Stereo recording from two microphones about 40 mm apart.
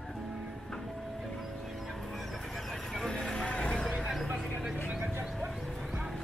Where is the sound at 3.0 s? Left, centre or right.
Centre.